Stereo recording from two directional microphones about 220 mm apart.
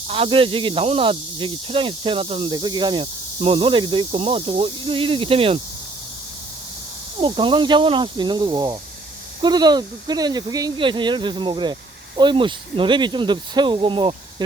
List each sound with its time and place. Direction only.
0.1 s speech: 25° right (ahead or behind)
7.2 s speech: 20° right (ahead or behind)